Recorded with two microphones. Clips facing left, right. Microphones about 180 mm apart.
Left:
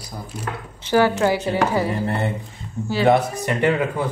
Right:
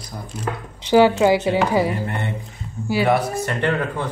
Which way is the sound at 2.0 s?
35° left (ahead or behind).